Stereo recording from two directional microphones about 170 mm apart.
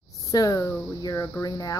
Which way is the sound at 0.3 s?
20° left (ahead or behind).